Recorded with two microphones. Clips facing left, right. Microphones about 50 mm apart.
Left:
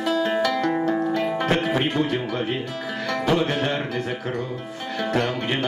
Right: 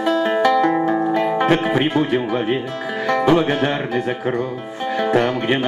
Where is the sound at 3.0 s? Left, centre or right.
Centre.